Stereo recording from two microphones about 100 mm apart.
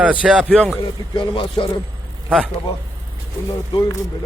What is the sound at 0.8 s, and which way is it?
Speech, 60° left (ahead or behind).